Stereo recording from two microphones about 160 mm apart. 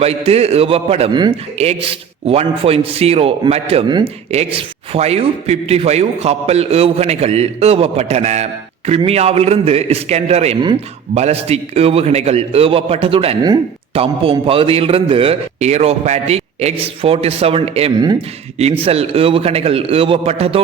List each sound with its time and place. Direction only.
0.0 s a man's voice: 40° right (ahead or behind)